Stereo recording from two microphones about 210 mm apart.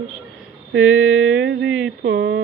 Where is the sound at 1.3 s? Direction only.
70° right (ahead or behind).